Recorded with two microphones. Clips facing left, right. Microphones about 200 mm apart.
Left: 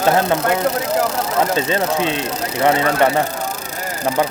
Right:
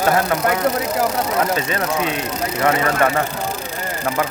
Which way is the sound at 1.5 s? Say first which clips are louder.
Left 3 dB; 30° left (ahead or behind).